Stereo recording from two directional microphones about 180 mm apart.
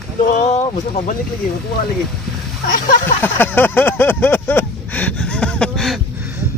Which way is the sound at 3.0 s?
10° left (ahead or behind).